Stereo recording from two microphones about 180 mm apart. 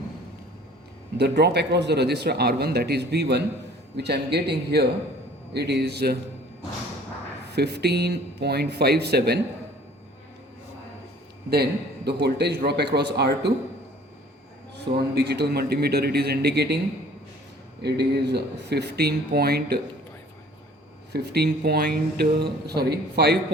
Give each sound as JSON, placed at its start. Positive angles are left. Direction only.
{"t": 1.2, "sound": "speech", "side_deg": -70}
{"t": 7.5, "sound": "speech", "side_deg": -65}
{"t": 11.5, "sound": "speech", "side_deg": -65}
{"t": 15.1, "sound": "speech", "side_deg": -65}
{"t": 17.8, "sound": "speech", "side_deg": -65}
{"t": 21.1, "sound": "speech", "side_deg": -65}